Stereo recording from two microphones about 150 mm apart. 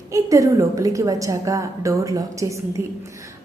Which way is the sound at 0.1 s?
20° right (ahead or behind).